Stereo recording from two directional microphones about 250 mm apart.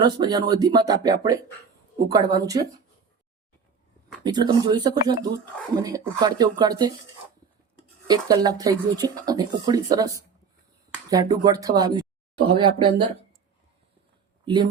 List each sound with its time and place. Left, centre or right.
0.0 s speech: centre
4.2 s speech: centre
8.0 s speech: centre
14.4 s speech: centre